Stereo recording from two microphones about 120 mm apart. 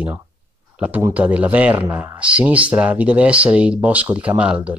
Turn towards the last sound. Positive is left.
turn(degrees=-10)  # may be behind; listen again after turning